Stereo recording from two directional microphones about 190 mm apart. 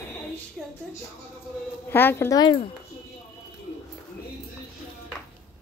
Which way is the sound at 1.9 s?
10° left (ahead or behind).